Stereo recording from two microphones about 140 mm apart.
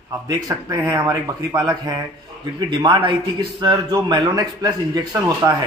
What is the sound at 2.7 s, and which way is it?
A man's voice, 35° right (ahead or behind).